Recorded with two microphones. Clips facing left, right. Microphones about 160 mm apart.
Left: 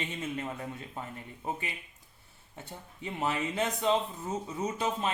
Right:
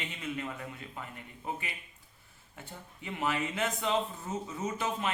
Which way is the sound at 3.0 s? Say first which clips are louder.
Left 1 dB; 25° left (ahead or behind).